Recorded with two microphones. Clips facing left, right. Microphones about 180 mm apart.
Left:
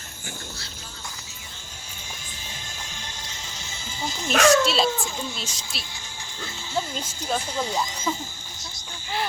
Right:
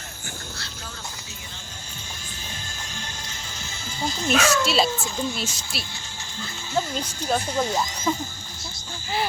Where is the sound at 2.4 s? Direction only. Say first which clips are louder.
Right 1 dB; 15° left (ahead or behind).